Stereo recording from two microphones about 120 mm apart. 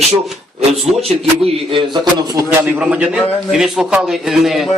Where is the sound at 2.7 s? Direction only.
10° right (ahead or behind).